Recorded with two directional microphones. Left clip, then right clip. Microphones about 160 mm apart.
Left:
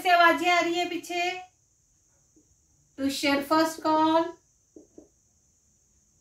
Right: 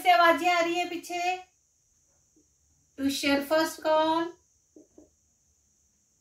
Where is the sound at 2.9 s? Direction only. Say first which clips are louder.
Left 1 dB; 10° right (ahead or behind).